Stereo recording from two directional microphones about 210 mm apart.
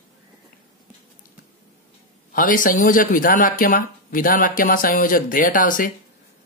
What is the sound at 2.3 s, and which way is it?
Speech, 40° left (ahead or behind).